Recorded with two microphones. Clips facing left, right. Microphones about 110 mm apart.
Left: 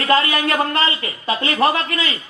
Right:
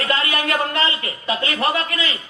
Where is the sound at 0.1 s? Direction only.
35° left (ahead or behind).